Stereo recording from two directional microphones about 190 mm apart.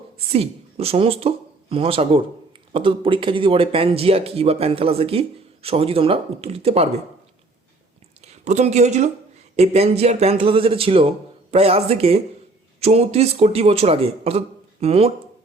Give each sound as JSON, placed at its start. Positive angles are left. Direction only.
{"t": 0.3, "sound": "a man's voice", "side_deg": -30}
{"t": 8.2, "sound": "a man's voice", "side_deg": -35}